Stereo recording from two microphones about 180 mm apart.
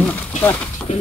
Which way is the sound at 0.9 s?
40° left (ahead or behind).